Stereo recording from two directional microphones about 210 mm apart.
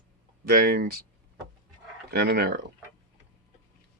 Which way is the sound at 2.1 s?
50° right (ahead or behind).